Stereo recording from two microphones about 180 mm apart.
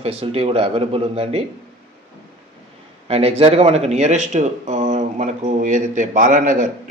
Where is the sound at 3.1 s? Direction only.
35° right (ahead or behind).